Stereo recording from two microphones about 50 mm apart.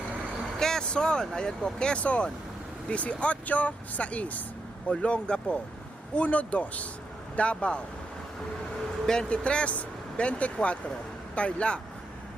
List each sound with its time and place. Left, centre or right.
0.6 s speech: centre
9.0 s speech: centre